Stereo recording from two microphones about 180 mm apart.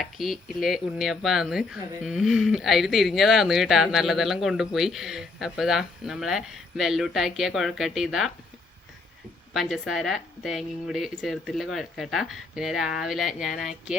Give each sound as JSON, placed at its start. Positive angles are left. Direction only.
{"t": 0.0, "sound": "a woman's voice", "side_deg": 0}
{"t": 9.5, "sound": "a woman's voice", "side_deg": 0}